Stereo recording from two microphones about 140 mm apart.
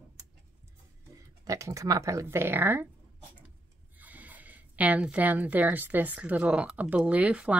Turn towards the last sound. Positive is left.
turn(degrees=-10)  # may be behind; listen again after turning